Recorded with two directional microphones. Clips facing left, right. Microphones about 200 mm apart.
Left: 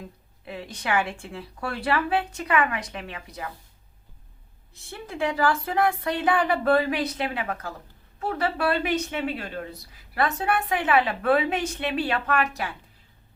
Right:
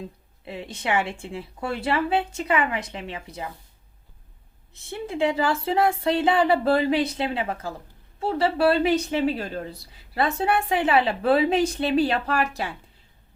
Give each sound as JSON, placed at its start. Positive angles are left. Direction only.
{"t": 0.0, "sound": "speech", "side_deg": -25}
{"t": 4.7, "sound": "speech", "side_deg": -25}